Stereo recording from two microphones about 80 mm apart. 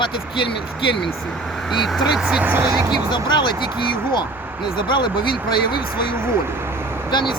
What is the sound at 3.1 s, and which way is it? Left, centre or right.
Speech, left.